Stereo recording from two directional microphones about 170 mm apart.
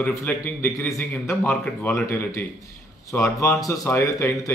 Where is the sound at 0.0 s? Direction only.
10° left (ahead or behind).